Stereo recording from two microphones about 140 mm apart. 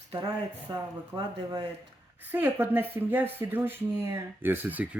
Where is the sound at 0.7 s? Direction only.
30° right (ahead or behind).